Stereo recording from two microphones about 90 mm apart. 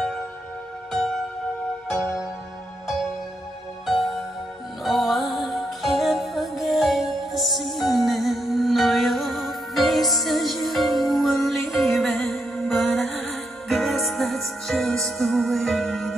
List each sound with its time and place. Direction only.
0.9 s music: 5° left (ahead or behind)
4.8 s music: centre (ahead or behind)